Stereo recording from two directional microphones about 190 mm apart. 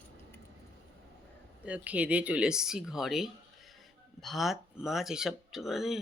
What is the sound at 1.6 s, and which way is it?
Speech, 5° right (ahead or behind).